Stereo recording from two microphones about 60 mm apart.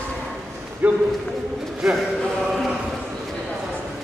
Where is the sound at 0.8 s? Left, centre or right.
Right.